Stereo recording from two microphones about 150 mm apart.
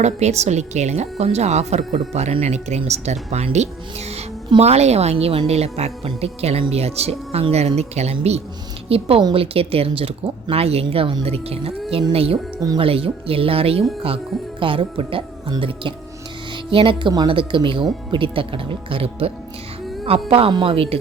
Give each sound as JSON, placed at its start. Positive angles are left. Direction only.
{"t": 0.0, "sound": "a woman's voice", "side_deg": -45}
{"t": 12.5, "sound": "speech", "side_deg": -25}
{"t": 12.8, "sound": "speech", "side_deg": -40}